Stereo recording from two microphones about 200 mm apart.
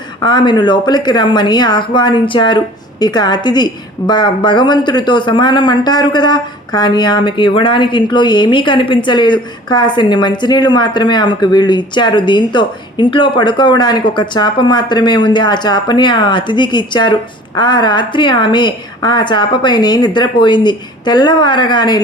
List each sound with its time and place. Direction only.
0.2 s a woman's voice: 20° left (ahead or behind)